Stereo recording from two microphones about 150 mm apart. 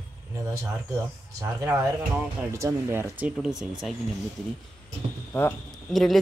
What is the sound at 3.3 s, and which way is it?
Speech, 5° right (ahead or behind).